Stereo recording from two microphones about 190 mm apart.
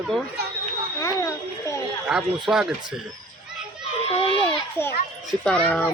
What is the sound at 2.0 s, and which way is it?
Speech, 5° right (ahead or behind).